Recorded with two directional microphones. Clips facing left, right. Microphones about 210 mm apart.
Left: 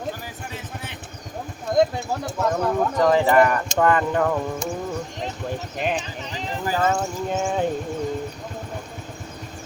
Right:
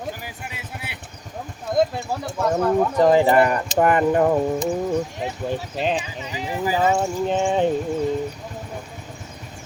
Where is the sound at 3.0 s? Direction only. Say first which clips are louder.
Right 1 dB; 30° right (ahead or behind).